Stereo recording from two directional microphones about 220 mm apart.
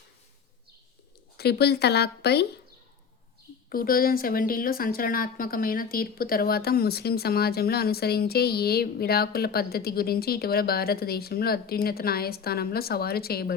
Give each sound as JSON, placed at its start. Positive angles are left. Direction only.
{"t": 1.4, "sound": "a woman's voice", "side_deg": 45}
{"t": 3.7, "sound": "a woman's voice", "side_deg": 40}